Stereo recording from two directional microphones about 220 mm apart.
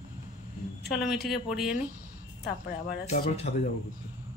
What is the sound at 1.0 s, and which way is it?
Speech, centre (ahead or behind).